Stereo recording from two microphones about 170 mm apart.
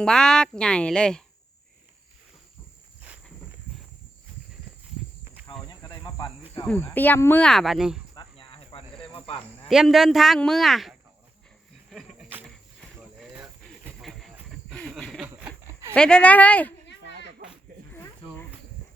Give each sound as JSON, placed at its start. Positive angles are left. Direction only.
{"t": 0.0, "sound": "a man's voice", "side_deg": 5}
{"t": 5.2, "sound": "cricket", "side_deg": -10}
{"t": 5.8, "sound": "cricket", "side_deg": 20}
{"t": 6.7, "sound": "speech", "side_deg": 10}
{"t": 8.1, "sound": "cricket", "side_deg": 30}
{"t": 9.6, "sound": "a man's voice", "side_deg": 0}
{"t": 11.9, "sound": "a sound", "side_deg": 0}
{"t": 13.0, "sound": "cricket", "side_deg": -5}
{"t": 15.3, "sound": "a sound", "side_deg": -15}
{"t": 16.0, "sound": "speech", "side_deg": 5}
{"t": 17.9, "sound": "snake", "side_deg": 10}